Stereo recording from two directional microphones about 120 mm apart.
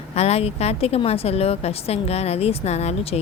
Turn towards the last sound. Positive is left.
turn(degrees=65)  # may be behind; listen again after turning